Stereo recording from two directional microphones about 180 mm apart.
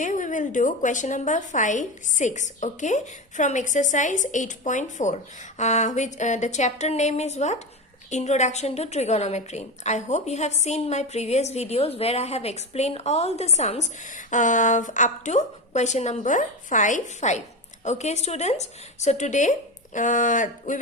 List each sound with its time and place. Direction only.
0.0 s a woman's voice: 45° left (ahead or behind)